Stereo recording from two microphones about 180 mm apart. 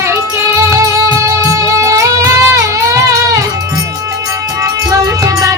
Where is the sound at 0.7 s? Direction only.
20° right (ahead or behind).